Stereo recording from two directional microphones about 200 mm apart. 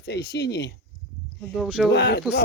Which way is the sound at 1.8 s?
55° left (ahead or behind).